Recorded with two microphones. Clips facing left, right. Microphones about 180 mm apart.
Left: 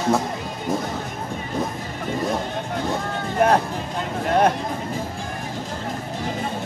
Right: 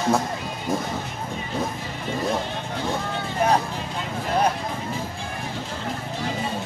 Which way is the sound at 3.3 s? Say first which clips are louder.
Left 3 dB; 55° left (ahead or behind).